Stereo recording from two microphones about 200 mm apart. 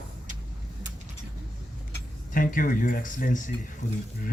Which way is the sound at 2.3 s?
45° left (ahead or behind).